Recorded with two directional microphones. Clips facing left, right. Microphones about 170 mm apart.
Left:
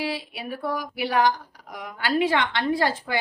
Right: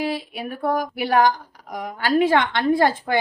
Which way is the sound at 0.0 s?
50° right (ahead or behind).